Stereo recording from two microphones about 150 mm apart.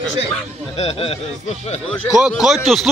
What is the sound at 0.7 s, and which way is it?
Speech, 40° left (ahead or behind).